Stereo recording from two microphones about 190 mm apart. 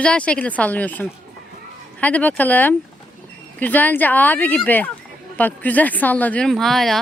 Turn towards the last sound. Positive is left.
turn(degrees=0)  # may be behind; listen again after turning